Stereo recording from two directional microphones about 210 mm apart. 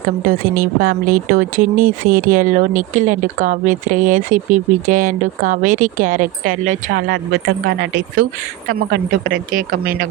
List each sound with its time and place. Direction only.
0.3 s a woman's voice: 45° right (ahead or behind)